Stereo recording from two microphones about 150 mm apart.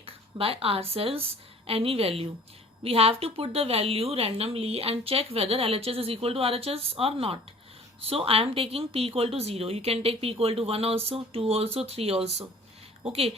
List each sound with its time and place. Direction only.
0.0 s a woman's voice: 40° right (ahead or behind)